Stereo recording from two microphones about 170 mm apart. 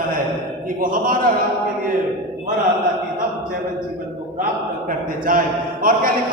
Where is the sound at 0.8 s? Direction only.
55° right (ahead or behind).